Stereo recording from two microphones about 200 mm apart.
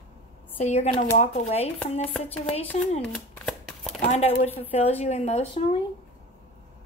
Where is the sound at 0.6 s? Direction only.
35° left (ahead or behind).